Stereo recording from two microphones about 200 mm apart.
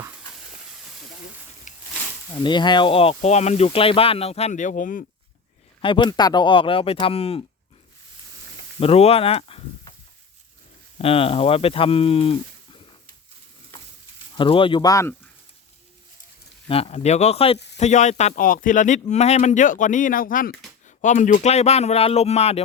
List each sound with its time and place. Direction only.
1.7 s a sound: 40° left (ahead or behind)
2.3 s speech: 25° left (ahead or behind); by 5.0 s 40° left (ahead or behind)
5.8 s speech: 25° left (ahead or behind)
8.8 s speech: 30° left (ahead or behind)
10.9 s speech: 30° left (ahead or behind)
14.3 s speech: 25° left (ahead or behind)
16.6 s speech: 30° left (ahead or behind)